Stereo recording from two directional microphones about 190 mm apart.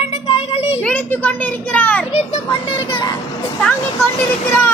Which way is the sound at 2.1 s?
30° left (ahead or behind).